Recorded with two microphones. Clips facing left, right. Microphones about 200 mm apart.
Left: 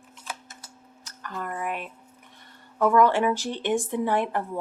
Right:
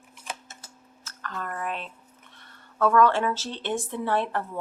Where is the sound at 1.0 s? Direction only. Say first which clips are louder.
Left 1 dB; 15° left (ahead or behind).